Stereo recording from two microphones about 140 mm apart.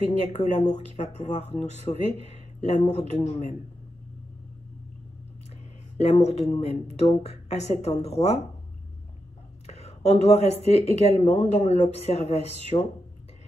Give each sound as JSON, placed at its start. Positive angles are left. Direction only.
{"t": 0.1, "sound": "speech", "side_deg": 50}
{"t": 5.9, "sound": "speech", "side_deg": 50}
{"t": 9.7, "sound": "speech", "side_deg": 50}